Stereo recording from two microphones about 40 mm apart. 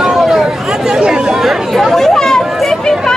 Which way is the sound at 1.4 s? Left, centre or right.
Centre.